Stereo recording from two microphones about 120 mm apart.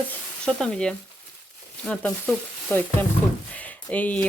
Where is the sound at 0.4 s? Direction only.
5° left (ahead or behind).